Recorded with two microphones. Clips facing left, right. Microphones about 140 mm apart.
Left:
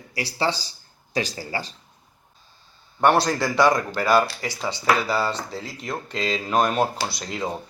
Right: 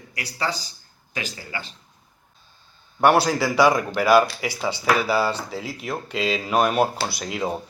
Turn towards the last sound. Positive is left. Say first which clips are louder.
# right 2 dB
turn(degrees=-5)  # may be behind; listen again after turning